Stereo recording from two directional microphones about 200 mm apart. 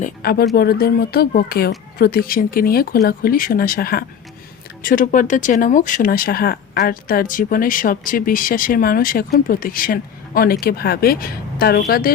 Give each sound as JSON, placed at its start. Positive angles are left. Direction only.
{"t": 0.0, "sound": "speech", "side_deg": 50}